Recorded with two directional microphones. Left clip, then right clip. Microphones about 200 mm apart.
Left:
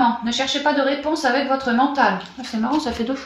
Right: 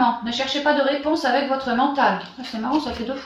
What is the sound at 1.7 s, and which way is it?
Speech, 40° left (ahead or behind).